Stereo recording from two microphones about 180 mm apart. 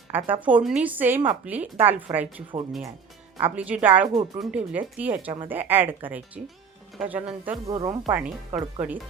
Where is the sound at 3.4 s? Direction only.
5° right (ahead or behind).